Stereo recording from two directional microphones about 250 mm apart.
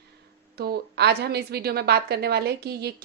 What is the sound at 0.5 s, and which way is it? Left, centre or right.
A woman's voice, right.